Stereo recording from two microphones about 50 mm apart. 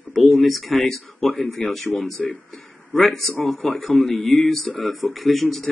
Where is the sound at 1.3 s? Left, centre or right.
Centre.